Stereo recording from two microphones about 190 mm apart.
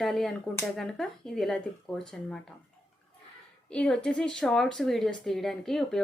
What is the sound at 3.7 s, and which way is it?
Speech, 5° left (ahead or behind).